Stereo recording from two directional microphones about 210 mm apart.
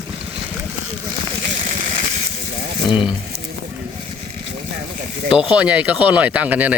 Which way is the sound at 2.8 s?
5° right (ahead or behind).